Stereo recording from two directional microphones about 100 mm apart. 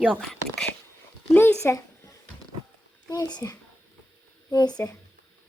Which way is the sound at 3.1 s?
45° left (ahead or behind).